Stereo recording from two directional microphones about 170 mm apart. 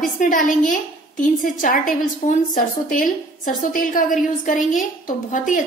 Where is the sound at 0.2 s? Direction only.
50° left (ahead or behind).